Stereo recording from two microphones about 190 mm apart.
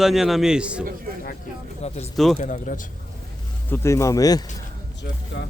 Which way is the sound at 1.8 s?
35° left (ahead or behind).